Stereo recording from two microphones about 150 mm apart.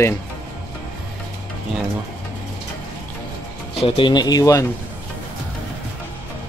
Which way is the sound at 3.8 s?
35° left (ahead or behind).